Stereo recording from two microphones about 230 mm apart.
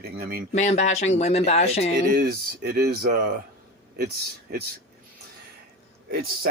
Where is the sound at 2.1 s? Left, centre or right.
Right.